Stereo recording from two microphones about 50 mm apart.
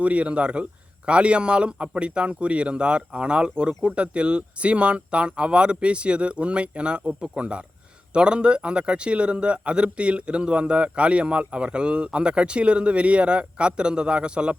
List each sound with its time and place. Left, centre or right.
0.0 s speech: right